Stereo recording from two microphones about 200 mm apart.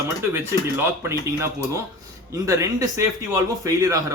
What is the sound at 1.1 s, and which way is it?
Speech, 15° right (ahead or behind).